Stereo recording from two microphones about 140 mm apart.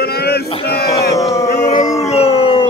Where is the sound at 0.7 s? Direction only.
90° left.